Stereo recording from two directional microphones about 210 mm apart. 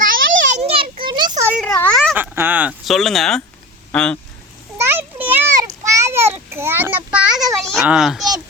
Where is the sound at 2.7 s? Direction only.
Centre (ahead or behind).